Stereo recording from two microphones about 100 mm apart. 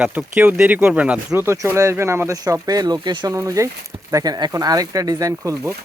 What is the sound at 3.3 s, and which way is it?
Speech, 30° right (ahead or behind).